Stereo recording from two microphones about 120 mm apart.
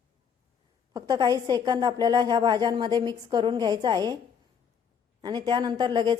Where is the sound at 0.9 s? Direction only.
30° right (ahead or behind).